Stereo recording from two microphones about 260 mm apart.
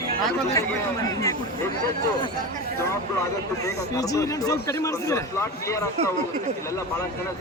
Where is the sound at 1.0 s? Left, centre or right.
Centre.